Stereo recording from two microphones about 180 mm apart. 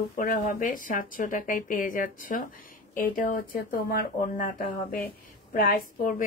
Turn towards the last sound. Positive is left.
turn(degrees=50)  # may be behind; listen again after turning